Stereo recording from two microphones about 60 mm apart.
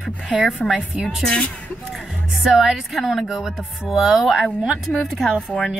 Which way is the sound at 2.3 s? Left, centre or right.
Centre.